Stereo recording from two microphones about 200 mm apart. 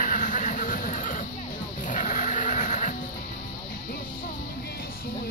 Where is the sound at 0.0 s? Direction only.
40° left (ahead or behind).